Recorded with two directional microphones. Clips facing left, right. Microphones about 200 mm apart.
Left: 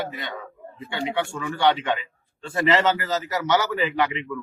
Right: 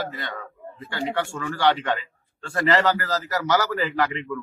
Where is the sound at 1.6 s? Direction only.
Centre (ahead or behind).